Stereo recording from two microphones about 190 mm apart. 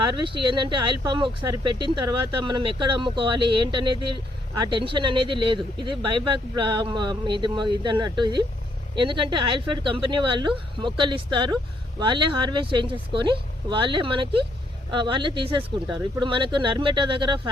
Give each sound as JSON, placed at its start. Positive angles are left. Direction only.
{"t": 0.0, "sound": "speech", "side_deg": -25}